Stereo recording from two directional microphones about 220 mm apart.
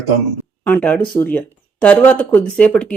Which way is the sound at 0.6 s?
5° left (ahead or behind).